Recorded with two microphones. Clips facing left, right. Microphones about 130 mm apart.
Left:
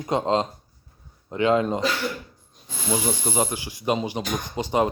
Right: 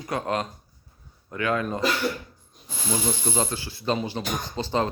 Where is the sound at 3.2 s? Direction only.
15° left (ahead or behind).